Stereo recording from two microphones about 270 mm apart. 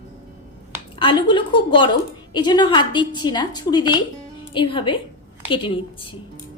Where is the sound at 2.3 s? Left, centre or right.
Centre.